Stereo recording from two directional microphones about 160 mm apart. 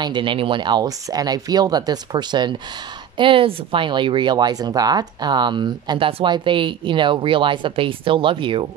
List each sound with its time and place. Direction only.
0.0 s speech: 30° right (ahead or behind)